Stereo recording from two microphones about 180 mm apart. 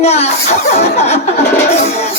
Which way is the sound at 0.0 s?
35° left (ahead or behind).